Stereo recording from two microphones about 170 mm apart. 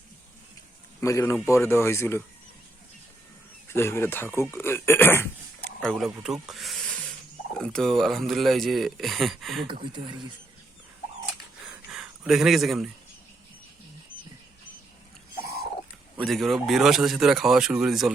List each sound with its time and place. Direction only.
1.0 s speech: 15° left (ahead or behind)
3.7 s speech: 15° left (ahead or behind)
5.8 s speech: centre (ahead or behind)
9.6 s speech: 30° right (ahead or behind)
11.7 s a sound: 5° right (ahead or behind)
16.1 s speech: centre (ahead or behind)